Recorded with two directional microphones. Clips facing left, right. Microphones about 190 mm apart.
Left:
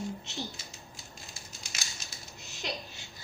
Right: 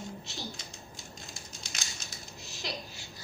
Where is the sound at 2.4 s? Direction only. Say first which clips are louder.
Left 1 dB; 20° left (ahead or behind).